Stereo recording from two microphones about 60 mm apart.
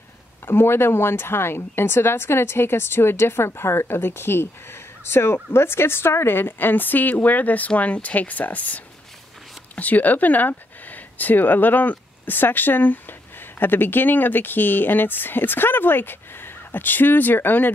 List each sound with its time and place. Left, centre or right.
0.5 s speech: left